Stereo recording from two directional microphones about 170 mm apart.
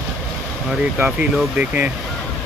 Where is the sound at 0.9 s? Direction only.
5° right (ahead or behind).